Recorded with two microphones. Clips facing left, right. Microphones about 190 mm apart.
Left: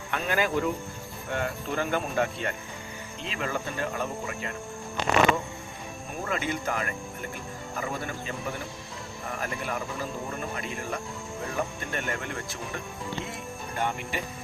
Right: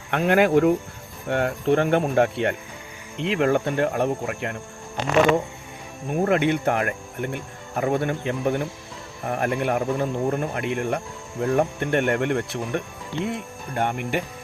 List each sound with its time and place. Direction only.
0.1 s speech: 65° right (ahead or behind)
6.1 s speech: 65° right (ahead or behind)